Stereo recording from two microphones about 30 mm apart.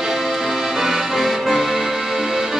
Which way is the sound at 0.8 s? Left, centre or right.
Centre.